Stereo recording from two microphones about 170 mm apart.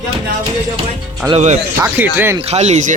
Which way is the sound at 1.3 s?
45° right (ahead or behind).